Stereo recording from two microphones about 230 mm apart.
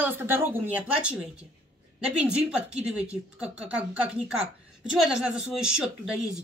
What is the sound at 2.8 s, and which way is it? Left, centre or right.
Speech, centre.